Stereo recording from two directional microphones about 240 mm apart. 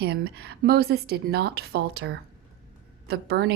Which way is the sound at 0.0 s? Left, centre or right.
Right.